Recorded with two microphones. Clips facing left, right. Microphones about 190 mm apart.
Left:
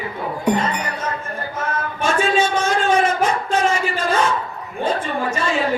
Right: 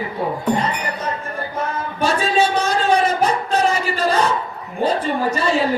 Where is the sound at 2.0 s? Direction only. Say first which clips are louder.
Right 1 dB; 35° right (ahead or behind).